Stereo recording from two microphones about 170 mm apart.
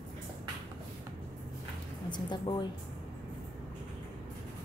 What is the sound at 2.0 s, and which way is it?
Speech, 25° left (ahead or behind).